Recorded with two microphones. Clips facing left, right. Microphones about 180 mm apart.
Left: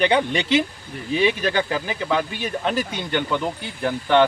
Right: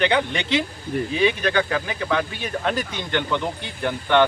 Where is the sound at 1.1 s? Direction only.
30° left (ahead or behind).